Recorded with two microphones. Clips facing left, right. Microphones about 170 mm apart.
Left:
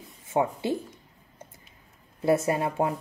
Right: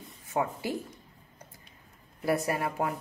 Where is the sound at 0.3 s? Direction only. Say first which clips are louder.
Left 5 dB; 25° left (ahead or behind).